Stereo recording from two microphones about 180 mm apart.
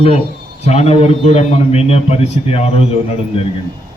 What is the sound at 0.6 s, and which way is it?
A man's voice, 35° left (ahead or behind).